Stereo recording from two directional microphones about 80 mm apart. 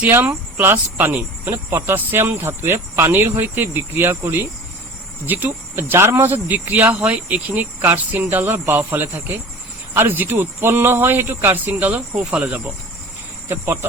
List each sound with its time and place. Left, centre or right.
0.1 s speech: right
12.1 s speech: centre
12.4 s speech: right